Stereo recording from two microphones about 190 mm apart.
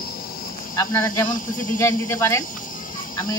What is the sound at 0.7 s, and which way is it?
Speech, 15° left (ahead or behind).